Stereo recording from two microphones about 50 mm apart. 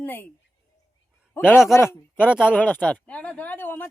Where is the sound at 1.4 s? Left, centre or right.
Left.